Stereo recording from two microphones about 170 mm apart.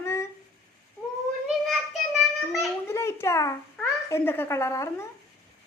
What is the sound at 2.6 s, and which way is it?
A child's voice, 15° left (ahead or behind).